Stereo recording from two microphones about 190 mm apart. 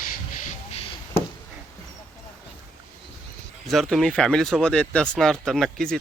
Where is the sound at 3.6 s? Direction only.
Centre (ahead or behind).